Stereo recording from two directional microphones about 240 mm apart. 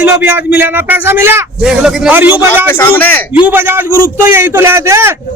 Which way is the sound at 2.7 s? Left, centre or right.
Centre.